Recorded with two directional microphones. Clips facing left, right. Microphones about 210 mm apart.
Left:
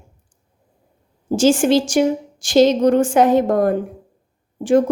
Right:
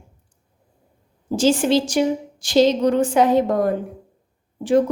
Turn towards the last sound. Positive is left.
turn(degrees=45)  # may be behind; listen again after turning